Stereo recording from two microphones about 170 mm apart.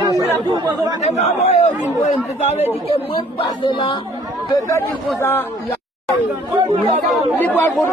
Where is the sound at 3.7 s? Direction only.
25° left (ahead or behind).